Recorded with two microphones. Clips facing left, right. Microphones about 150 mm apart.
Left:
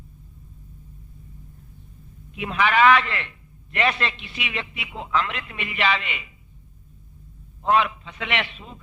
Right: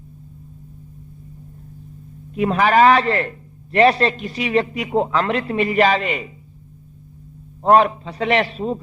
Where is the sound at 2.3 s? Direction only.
40° right (ahead or behind).